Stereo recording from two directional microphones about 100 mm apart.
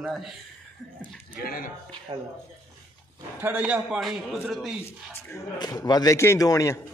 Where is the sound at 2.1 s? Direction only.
60° right (ahead or behind).